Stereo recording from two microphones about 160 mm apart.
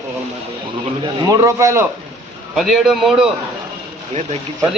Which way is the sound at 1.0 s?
20° right (ahead or behind).